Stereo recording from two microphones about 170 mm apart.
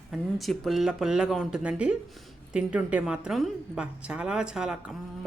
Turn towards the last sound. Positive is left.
turn(degrees=-5)  # may be behind; listen again after turning